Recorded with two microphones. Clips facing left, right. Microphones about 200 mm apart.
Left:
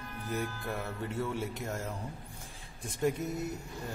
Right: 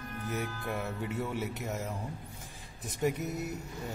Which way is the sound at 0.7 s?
10° right (ahead or behind).